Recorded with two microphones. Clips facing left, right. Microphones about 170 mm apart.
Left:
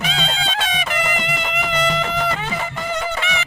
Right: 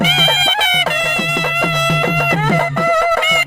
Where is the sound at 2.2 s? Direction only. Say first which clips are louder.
Right 8 dB; 60° right (ahead or behind).